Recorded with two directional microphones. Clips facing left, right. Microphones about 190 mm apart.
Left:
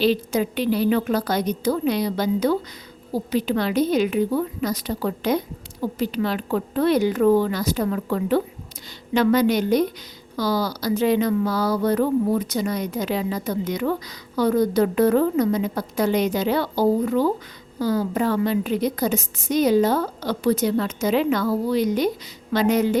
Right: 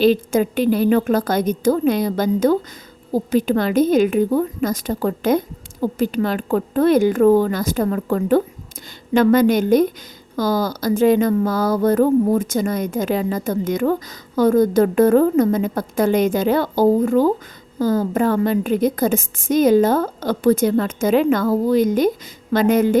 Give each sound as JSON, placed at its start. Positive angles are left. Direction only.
{"t": 0.0, "sound": "a woman's voice", "side_deg": -50}